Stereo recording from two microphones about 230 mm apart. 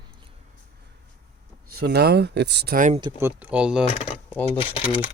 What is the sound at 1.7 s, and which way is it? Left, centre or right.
Speech, right.